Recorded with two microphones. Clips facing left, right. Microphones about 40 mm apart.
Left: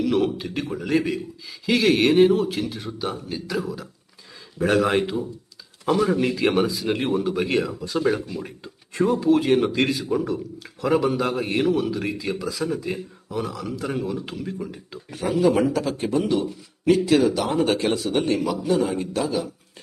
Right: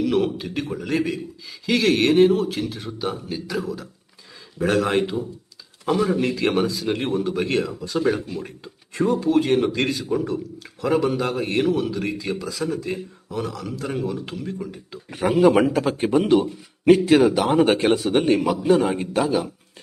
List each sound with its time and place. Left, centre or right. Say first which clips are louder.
0.0 s a man's voice: even; centre
15.1 s a man's voice: right 4 dB; right